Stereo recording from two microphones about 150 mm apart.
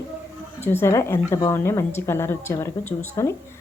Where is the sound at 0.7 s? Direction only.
15° left (ahead or behind).